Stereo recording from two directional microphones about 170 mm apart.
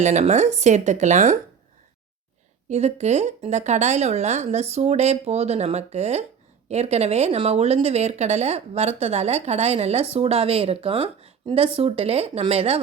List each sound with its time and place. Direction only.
0.0 s speech: 45° right (ahead or behind)
2.6 s speech: 40° right (ahead or behind)